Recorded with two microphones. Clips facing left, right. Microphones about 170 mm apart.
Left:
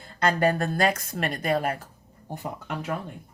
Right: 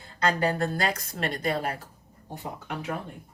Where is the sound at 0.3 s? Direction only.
50° left (ahead or behind).